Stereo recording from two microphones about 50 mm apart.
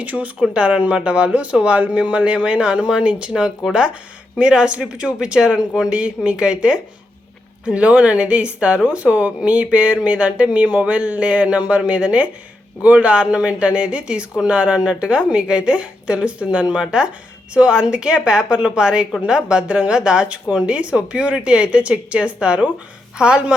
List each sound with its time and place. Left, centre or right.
0.0 s speech: right